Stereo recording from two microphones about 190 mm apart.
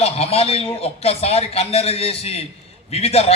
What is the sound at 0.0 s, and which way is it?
A man's voice, 30° left (ahead or behind).